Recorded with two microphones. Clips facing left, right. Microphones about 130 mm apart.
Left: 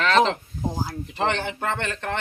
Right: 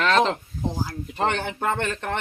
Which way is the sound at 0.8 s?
5° left (ahead or behind).